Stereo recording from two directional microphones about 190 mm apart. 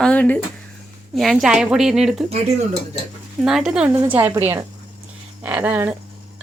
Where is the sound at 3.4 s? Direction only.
Centre (ahead or behind).